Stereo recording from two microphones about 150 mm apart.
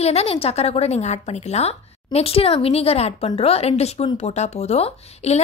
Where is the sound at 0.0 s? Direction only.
45° left (ahead or behind).